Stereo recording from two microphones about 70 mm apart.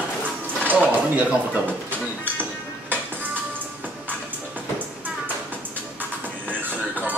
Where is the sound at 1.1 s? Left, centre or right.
Right.